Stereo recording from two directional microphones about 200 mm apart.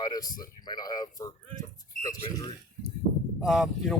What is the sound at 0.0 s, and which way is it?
Speech, 20° left (ahead or behind).